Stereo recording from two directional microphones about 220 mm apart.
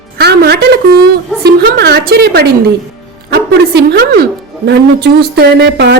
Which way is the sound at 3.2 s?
45° right (ahead or behind).